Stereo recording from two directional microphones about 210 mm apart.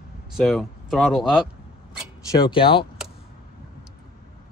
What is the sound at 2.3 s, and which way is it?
Speech, 20° left (ahead or behind).